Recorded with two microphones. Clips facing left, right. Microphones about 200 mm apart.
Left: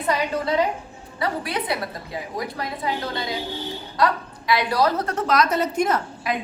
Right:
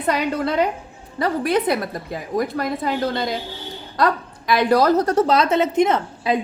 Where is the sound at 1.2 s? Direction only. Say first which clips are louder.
Right 7 dB; 45° right (ahead or behind).